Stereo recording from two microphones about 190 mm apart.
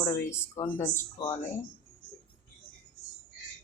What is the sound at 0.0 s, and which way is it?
Speech, 15° left (ahead or behind).